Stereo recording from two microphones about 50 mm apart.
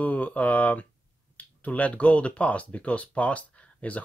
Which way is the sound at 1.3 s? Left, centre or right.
Left.